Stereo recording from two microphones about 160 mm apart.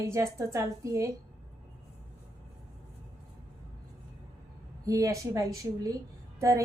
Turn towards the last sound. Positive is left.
turn(degrees=-20)  # may be behind; listen again after turning